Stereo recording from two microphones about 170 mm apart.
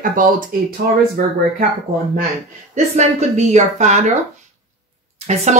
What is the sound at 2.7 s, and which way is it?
Speech, 40° right (ahead or behind).